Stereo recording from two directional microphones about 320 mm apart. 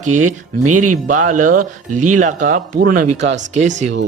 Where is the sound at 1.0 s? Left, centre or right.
Right.